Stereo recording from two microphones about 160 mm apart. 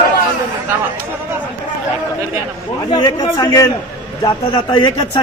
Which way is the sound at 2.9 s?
25° left (ahead or behind).